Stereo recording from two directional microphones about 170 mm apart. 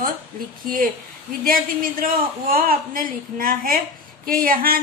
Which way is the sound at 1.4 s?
55° right (ahead or behind).